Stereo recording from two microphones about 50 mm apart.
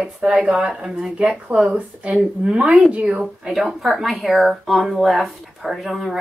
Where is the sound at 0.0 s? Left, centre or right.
Centre.